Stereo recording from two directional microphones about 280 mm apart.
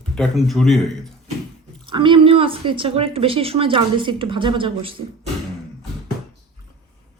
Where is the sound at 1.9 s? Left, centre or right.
Centre.